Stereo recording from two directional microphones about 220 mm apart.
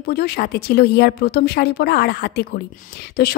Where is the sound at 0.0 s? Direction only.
45° left (ahead or behind).